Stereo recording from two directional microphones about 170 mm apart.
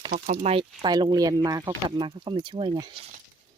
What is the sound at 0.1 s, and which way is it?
Speech, 45° right (ahead or behind).